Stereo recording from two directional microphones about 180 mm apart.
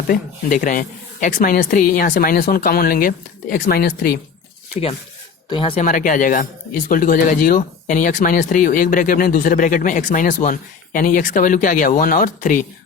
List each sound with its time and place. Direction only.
0.1 s speech: 50° left (ahead or behind)
5.5 s speech: 30° left (ahead or behind)
5.8 s speech: 45° left (ahead or behind)